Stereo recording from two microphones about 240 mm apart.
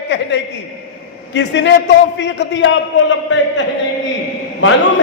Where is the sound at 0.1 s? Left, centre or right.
Left.